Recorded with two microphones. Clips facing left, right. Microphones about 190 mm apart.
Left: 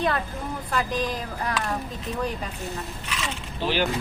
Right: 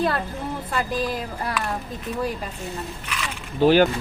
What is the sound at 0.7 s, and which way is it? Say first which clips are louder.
Speech: right 1 dB; 5° right (ahead or behind).